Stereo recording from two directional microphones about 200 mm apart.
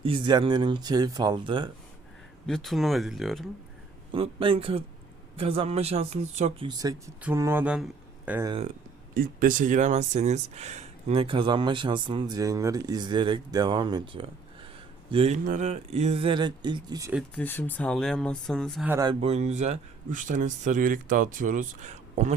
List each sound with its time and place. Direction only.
0.0 s speech: 25° right (ahead or behind)
2.5 s speech: centre (ahead or behind)
4.1 s speech: 25° right (ahead or behind)
6.7 s speech: 20° right (ahead or behind)
9.1 s speech: 45° right (ahead or behind); by 17.1 s 20° right (ahead or behind)
17.3 s speech: 10° left (ahead or behind)
18.9 s speech: 15° right (ahead or behind)
19.2 s speech: 35° right (ahead or behind)